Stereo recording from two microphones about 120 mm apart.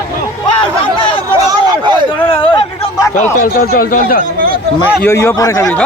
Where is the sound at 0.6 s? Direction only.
45° left (ahead or behind).